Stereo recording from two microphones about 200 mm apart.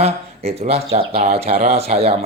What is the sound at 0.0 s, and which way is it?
Speech, 30° right (ahead or behind).